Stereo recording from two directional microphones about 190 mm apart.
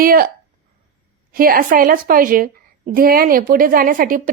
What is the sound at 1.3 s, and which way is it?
A woman's voice, 50° right (ahead or behind).